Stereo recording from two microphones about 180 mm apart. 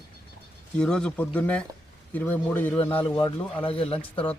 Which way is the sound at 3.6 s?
30° left (ahead or behind).